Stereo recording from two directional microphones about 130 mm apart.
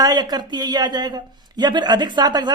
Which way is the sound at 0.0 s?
30° right (ahead or behind).